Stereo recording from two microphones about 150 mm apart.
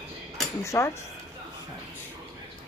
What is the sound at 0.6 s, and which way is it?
Speech, 20° left (ahead or behind).